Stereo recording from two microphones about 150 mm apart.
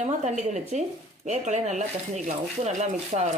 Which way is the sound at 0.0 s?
50° right (ahead or behind).